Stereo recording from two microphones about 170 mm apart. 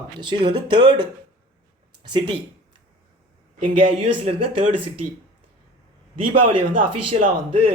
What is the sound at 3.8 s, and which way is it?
Speech, 35° right (ahead or behind).